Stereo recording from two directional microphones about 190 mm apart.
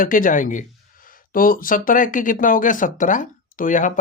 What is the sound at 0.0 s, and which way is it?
Speech, 45° left (ahead or behind).